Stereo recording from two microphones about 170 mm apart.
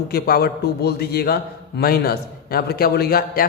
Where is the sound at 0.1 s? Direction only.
65° left (ahead or behind).